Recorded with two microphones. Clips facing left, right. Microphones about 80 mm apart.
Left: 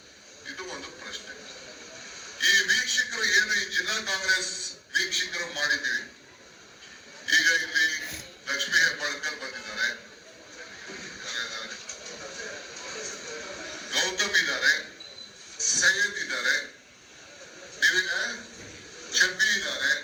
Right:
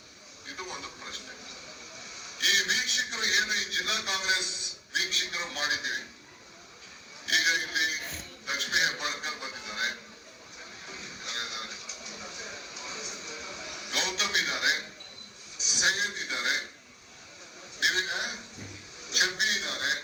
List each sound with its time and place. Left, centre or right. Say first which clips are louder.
0.5 s television: left 1 dB; left
1.0 s a sound: left 2 dB; left
2.2 s a man's voice: left 5 dB; left
7.3 s a man's voice: left 4 dB; left
10.8 s music: left 1 dB; left
12.4 s a sound: left 3 dB; left
15.5 s a man's voice: left 4 dB; left
17.7 s a sound: left 4 dB; left
19.0 s a man's voice: left 4 dB; left